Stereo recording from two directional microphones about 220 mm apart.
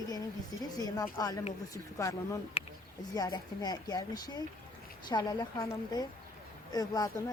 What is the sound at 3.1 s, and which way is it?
Speech, 15° left (ahead or behind).